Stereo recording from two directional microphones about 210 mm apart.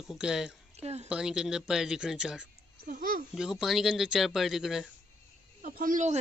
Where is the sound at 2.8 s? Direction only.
40° right (ahead or behind).